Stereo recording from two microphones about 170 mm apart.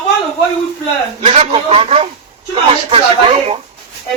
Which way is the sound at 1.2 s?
35° right (ahead or behind).